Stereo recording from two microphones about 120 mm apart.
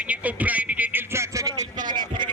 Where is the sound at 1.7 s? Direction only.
90° right.